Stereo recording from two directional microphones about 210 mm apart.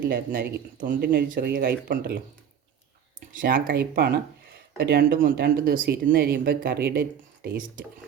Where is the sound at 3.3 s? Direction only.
45° right (ahead or behind).